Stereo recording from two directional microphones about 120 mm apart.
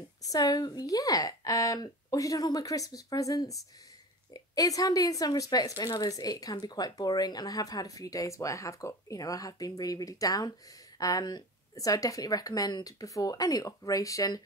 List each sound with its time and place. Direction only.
0.2 s a woman's voice: 30° left (ahead or behind)